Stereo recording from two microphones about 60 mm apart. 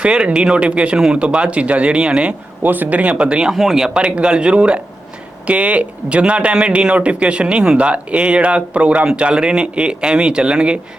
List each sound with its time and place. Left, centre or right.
0.0 s speech: centre
2.6 s speech: right
3.5 s speech: centre